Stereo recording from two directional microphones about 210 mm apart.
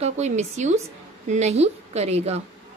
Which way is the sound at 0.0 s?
35° right (ahead or behind).